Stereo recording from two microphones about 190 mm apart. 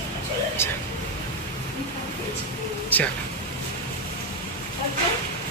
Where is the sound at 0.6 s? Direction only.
15° left (ahead or behind).